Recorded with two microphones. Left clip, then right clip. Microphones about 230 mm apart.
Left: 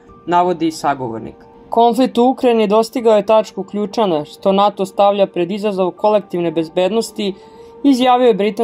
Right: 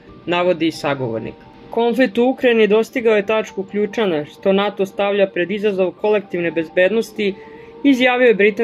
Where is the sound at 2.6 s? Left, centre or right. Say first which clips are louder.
Left 1 dB; left.